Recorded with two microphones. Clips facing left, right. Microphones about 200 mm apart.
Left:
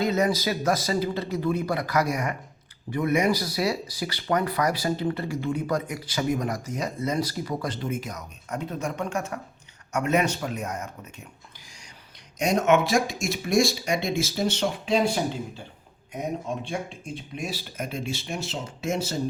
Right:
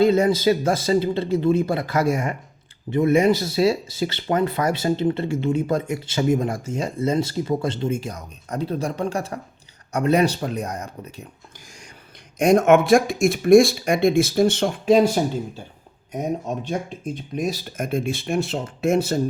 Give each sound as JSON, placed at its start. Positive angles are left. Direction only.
{"t": 0.0, "sound": "speech", "side_deg": -30}
{"t": 12.4, "sound": "speech", "side_deg": -55}
{"t": 17.3, "sound": "speech", "side_deg": -45}